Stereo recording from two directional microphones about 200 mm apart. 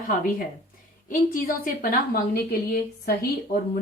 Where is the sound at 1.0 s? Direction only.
45° left (ahead or behind).